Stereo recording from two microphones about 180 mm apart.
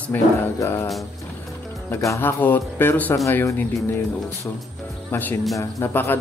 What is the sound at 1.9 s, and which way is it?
Speech, 15° left (ahead or behind).